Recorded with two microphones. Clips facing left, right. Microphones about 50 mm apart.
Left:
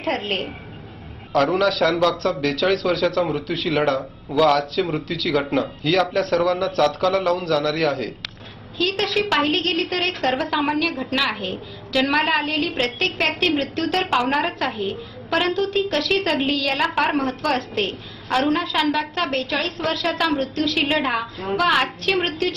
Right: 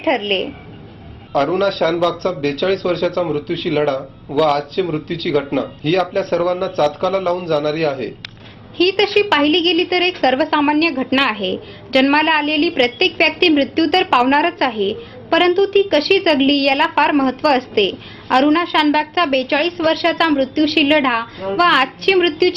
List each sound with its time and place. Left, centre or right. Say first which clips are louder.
0.0 s a woman's voice: right 7 dB; right
1.5 s speech: right 3 dB; centre
8.7 s a woman's voice: right 8 dB; right
11.1 s a woman's voice: right 6 dB; right
21.5 s a woman's voice: right 6 dB; right